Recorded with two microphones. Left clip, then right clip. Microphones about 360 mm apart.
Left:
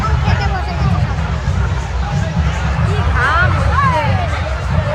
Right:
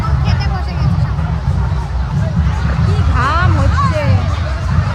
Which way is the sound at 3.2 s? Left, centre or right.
Centre.